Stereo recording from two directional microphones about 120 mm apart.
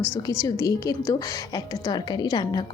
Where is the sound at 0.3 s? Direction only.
30° left (ahead or behind).